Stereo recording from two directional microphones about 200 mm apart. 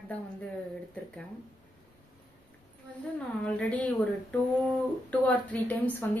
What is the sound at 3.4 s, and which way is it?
Speech, 5° left (ahead or behind).